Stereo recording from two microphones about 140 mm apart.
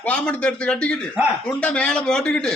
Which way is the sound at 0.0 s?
10° left (ahead or behind).